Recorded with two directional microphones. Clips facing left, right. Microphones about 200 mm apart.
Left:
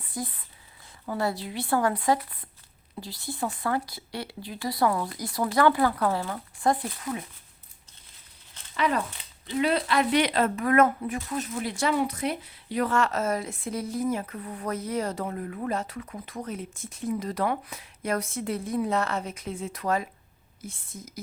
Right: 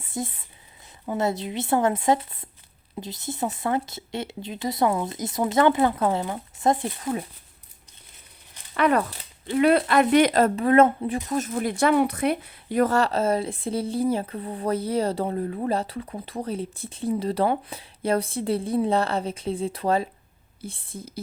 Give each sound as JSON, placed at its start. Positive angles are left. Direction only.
{"t": 0.0, "sound": "speech", "side_deg": -25}
{"t": 8.7, "sound": "speech", "side_deg": -60}
{"t": 11.3, "sound": "speech", "side_deg": -50}